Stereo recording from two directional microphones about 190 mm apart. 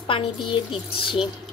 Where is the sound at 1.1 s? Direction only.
5° right (ahead or behind).